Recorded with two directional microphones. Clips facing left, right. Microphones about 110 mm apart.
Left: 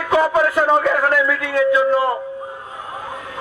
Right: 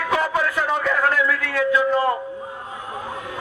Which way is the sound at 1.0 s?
20° left (ahead or behind).